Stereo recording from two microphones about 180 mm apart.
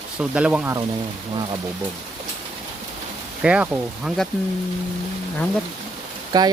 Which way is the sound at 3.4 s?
5° right (ahead or behind).